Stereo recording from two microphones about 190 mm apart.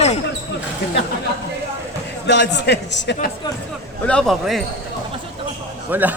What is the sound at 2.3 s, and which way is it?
A man's voice, 65° left (ahead or behind).